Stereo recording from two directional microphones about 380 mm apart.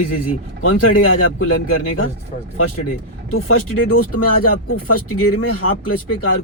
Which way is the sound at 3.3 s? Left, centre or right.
Left.